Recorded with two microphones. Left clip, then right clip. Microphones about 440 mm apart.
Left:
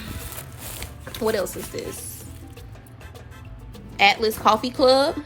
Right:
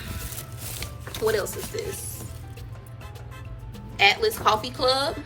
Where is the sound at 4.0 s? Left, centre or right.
Centre.